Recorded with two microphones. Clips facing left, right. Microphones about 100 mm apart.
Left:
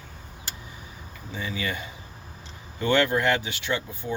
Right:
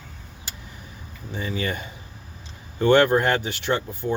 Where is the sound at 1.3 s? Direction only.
45° right (ahead or behind).